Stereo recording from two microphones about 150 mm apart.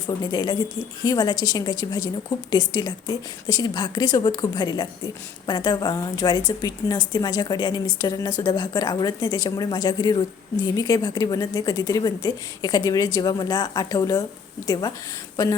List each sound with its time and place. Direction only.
0.3 s a woman's voice: 25° left (ahead or behind)